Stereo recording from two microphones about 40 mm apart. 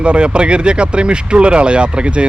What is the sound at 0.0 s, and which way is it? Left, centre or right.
Speech, right.